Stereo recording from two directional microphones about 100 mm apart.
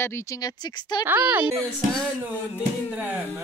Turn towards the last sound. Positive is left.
turn(degrees=-15)  # may be behind; listen again after turning